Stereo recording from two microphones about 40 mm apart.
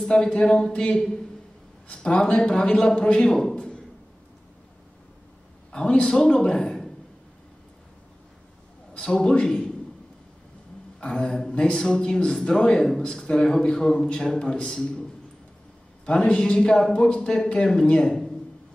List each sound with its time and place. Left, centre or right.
0.1 s a man's voice: left
3.3 s a man's voice: centre
3.5 s a sound: left
5.7 s a man's voice: left
9.1 s a man's voice: centre
11.0 s a man's voice: left
16.1 s a man's voice: left